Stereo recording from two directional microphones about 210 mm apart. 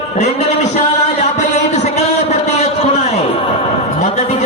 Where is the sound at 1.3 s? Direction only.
35° left (ahead or behind).